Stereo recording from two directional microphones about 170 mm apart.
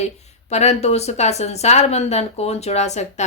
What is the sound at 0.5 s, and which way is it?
Speech, 40° left (ahead or behind).